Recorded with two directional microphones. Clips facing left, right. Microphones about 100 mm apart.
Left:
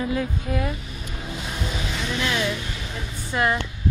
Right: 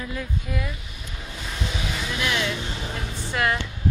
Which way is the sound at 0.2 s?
40° left (ahead or behind).